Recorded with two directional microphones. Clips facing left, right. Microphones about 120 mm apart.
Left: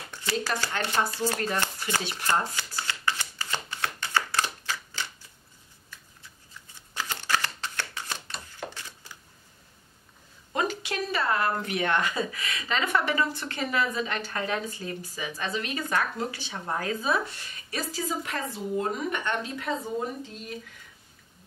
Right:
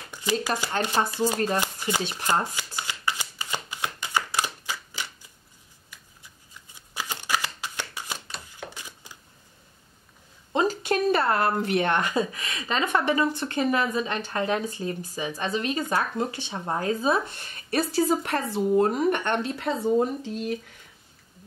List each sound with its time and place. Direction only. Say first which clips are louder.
0.1 s shuffling cards: right 4 dB; 15° right (ahead or behind)
0.8 s speech: right 2 dB; 15° right (ahead or behind)
2.0 s shuffling cards: right 2 dB; 25° right (ahead or behind)
8.7 s a sound: right 1 dB; 15° right (ahead or behind)
10.5 s a sound: right 4 dB; 30° right (ahead or behind)
10.8 s a sound: right 7 dB; 50° right (ahead or behind)
11.7 s speech: right 3 dB; 30° right (ahead or behind)
17.4 s a woman's voice: right 8 dB; 50° right (ahead or behind)
19.5 s speech: right 4 dB; 30° right (ahead or behind)
20.2 s speech: right 9 dB; 75° right (ahead or behind)